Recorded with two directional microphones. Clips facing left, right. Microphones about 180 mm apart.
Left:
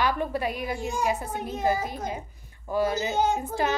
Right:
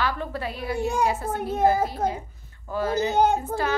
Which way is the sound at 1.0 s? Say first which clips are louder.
Right 3 dB; 15° left (ahead or behind).